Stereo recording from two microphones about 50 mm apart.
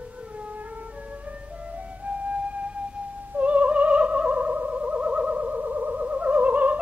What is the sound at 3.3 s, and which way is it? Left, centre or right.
Opera, right.